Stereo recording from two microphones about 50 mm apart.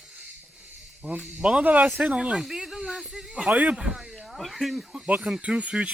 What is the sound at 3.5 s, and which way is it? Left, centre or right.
Speech, right.